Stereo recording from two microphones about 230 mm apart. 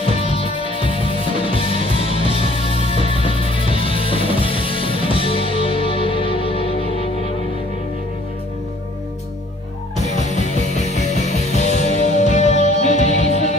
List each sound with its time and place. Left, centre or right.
0.0 s music: left
9.9 s music: left